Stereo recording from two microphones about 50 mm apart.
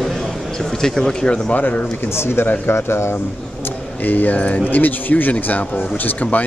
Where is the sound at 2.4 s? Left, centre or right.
Left.